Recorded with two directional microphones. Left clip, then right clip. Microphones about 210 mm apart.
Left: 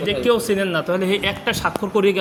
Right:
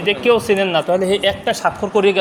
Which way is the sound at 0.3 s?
10° left (ahead or behind).